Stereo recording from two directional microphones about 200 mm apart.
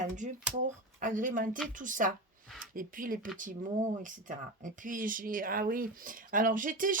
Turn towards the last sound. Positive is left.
turn(degrees=-40)  # may be behind; listen again after turning